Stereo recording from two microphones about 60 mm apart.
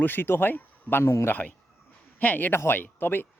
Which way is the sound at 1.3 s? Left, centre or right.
Left.